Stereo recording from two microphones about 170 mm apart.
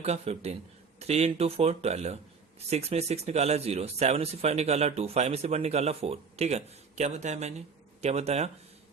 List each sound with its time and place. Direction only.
0.0 s speech: 40° right (ahead or behind)